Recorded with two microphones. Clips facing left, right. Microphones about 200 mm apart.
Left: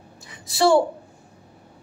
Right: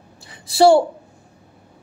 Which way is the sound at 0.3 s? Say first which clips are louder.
Right 5 dB; 30° right (ahead or behind).